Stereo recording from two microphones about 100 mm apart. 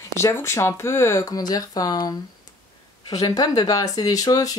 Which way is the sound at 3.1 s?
40° left (ahead or behind).